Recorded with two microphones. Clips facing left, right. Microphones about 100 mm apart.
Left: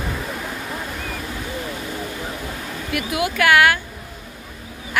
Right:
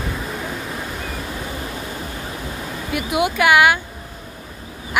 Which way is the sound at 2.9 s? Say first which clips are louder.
Right 3 dB; 20° right (ahead or behind).